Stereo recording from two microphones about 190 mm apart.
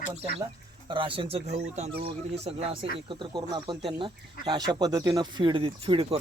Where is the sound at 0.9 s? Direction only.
25° right (ahead or behind).